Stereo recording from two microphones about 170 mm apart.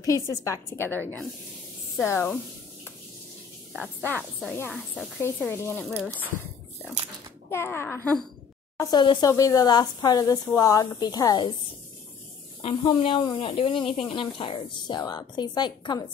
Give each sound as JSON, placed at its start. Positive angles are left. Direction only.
{"t": 0.0, "sound": "a child's voice", "side_deg": 20}
{"t": 4.2, "sound": "speech", "side_deg": 0}
{"t": 4.9, "sound": "a child's voice", "side_deg": 10}
{"t": 5.8, "sound": "speech", "side_deg": 0}
{"t": 7.5, "sound": "a child's voice", "side_deg": 15}
{"t": 8.7, "sound": "speech", "side_deg": 25}
{"t": 12.6, "sound": "speech", "side_deg": 30}